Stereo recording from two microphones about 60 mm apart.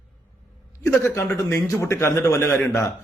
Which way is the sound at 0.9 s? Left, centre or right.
Left.